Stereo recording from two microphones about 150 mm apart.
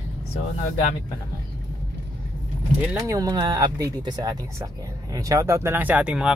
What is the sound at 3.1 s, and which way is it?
Speech, 25° right (ahead or behind).